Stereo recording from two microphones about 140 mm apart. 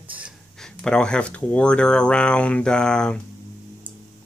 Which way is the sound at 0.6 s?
5° left (ahead or behind).